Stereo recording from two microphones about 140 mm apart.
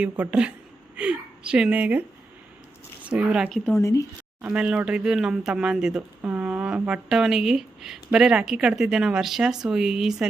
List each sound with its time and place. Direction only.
0.0 s speech: 10° right (ahead or behind)
3.8 s speech: 20° left (ahead or behind)
4.4 s speech: 10° right (ahead or behind)